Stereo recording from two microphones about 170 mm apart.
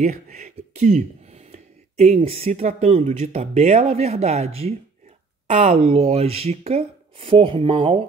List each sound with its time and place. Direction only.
0.0 s speech: 50° right (ahead or behind); by 8.0 s 30° right (ahead or behind)